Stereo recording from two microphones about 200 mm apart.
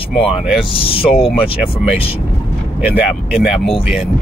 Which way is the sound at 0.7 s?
30° left (ahead or behind).